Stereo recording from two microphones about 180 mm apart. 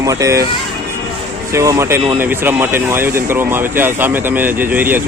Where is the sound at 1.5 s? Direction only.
15° right (ahead or behind).